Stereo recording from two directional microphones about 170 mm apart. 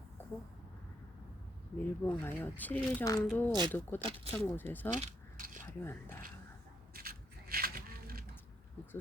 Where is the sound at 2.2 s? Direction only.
10° left (ahead or behind).